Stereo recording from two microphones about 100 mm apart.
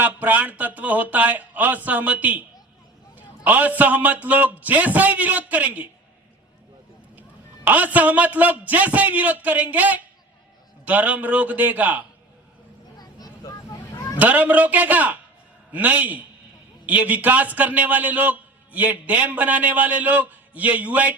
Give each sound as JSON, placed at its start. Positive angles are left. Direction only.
{"t": 0.0, "sound": "a man's voice", "side_deg": -15}
{"t": 3.2, "sound": "a sound", "side_deg": -15}
{"t": 3.8, "sound": "a man's voice", "side_deg": -15}
{"t": 7.2, "sound": "a man's voice", "side_deg": -15}
{"t": 13.0, "sound": "vehicle", "side_deg": 40}
{"t": 14.2, "sound": "a man's voice", "side_deg": -15}